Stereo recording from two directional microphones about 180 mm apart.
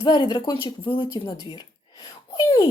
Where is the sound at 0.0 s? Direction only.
25° left (ahead or behind).